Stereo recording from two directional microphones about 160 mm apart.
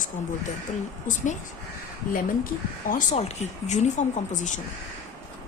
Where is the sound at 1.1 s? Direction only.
55° left (ahead or behind).